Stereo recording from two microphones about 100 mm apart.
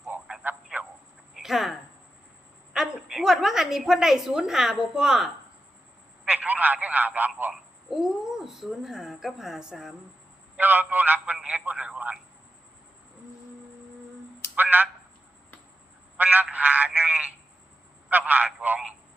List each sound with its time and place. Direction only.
0.1 s a sound: 15° right (ahead or behind)
1.4 s a sound: centre (ahead or behind)
2.7 s a woman's voice: 5° right (ahead or behind)
6.2 s speech: 15° right (ahead or behind)
7.5 s speech: centre (ahead or behind)
10.6 s speech: 20° right (ahead or behind)
14.5 s telephone: 15° right (ahead or behind)
16.1 s speech: 15° right (ahead or behind)